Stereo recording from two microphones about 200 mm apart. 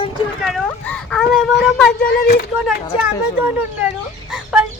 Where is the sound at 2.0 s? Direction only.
50° left (ahead or behind).